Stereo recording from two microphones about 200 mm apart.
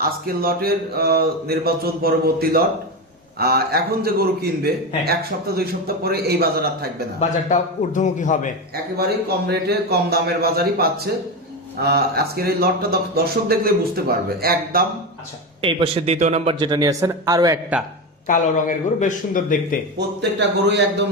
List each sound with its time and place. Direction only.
0.0 s speech: 45° right (ahead or behind)
7.2 s a man's voice: 35° left (ahead or behind)
8.7 s speech: 50° right (ahead or behind)
15.6 s a man's voice: 25° right (ahead or behind)
18.3 s a man's voice: 40° left (ahead or behind)
20.0 s a man's voice: 60° right (ahead or behind)